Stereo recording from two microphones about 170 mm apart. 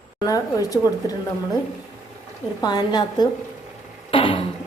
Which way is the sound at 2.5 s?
25° left (ahead or behind).